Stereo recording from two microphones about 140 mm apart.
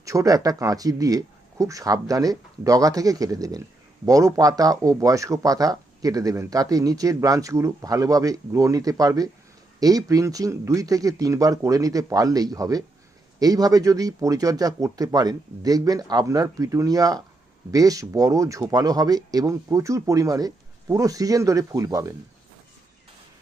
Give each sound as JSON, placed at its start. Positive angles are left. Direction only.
{"t": 0.0, "sound": "speech", "side_deg": -25}